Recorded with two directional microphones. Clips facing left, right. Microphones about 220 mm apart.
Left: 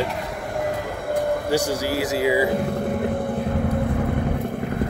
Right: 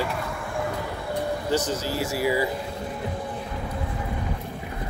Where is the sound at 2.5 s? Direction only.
55° left (ahead or behind).